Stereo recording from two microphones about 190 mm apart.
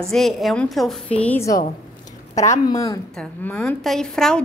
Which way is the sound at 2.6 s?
20° left (ahead or behind).